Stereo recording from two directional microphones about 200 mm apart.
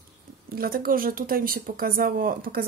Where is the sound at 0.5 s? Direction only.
50° right (ahead or behind).